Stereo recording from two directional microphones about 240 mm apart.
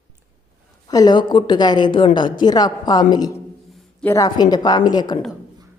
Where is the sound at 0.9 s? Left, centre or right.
Centre.